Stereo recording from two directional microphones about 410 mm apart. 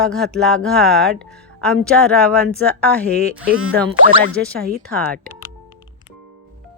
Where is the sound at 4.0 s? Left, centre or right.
Left.